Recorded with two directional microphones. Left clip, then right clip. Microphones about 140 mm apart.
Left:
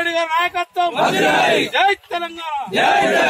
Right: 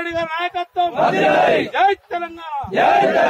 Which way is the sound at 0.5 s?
15° left (ahead or behind).